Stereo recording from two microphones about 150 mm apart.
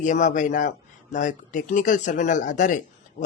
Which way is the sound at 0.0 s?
55° left (ahead or behind).